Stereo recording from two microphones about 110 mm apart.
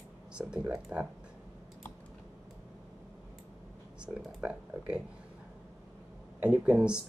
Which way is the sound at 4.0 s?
10° right (ahead or behind).